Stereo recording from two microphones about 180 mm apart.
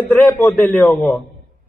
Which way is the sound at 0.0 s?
10° left (ahead or behind).